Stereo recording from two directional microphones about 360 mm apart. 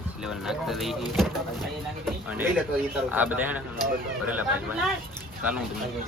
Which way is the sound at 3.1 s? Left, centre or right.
Centre.